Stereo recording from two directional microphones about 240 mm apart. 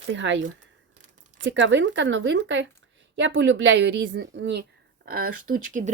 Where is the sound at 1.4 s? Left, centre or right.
Right.